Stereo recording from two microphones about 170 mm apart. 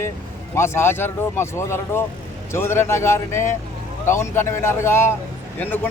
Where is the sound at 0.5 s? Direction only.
15° left (ahead or behind).